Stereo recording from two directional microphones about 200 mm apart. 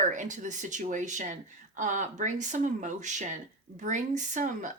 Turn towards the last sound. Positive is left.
turn(degrees=-40)  # may be behind; listen again after turning